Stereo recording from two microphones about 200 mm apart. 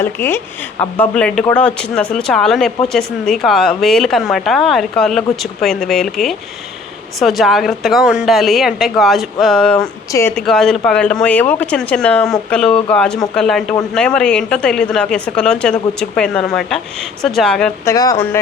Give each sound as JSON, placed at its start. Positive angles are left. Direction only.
{"t": 0.0, "sound": "speech", "side_deg": 10}
{"t": 9.7, "sound": "speech", "side_deg": 15}
{"t": 17.8, "sound": "speech", "side_deg": 20}